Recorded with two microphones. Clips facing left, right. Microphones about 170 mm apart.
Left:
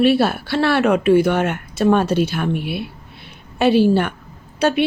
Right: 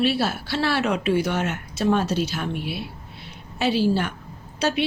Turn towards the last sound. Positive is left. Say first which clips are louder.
# left 6 dB
turn(degrees=55)  # may be behind; listen again after turning